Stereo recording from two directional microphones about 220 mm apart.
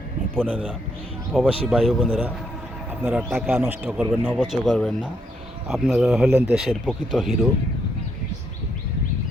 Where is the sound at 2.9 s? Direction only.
10° right (ahead or behind).